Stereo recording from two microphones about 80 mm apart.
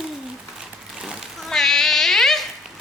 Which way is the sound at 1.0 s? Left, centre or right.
Centre.